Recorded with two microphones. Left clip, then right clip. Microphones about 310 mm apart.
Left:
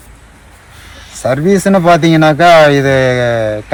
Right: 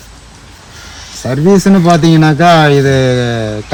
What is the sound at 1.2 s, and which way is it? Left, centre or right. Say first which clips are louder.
Speech: even; centre.